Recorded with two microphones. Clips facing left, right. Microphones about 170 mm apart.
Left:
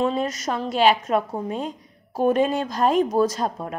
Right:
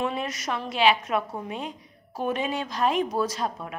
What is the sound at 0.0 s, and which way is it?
A woman's voice, 35° left (ahead or behind).